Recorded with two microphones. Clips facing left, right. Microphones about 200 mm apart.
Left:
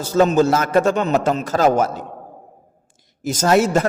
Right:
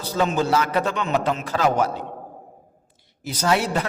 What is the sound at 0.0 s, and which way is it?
A man's voice, 45° left (ahead or behind).